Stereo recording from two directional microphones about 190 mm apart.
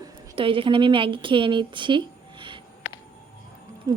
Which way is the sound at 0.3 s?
25° right (ahead or behind).